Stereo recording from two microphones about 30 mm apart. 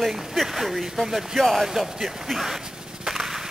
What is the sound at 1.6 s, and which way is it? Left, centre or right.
Speech, centre.